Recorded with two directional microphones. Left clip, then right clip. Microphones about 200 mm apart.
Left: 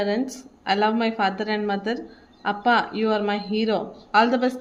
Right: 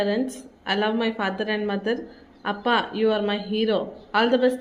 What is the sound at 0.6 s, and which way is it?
Speech, 30° left (ahead or behind).